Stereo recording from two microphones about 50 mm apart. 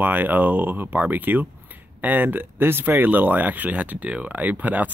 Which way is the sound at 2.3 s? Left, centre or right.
Right.